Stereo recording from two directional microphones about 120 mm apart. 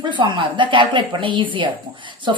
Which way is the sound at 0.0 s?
40° right (ahead or behind).